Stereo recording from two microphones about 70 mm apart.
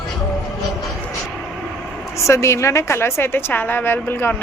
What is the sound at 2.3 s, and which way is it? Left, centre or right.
A woman's voice, left.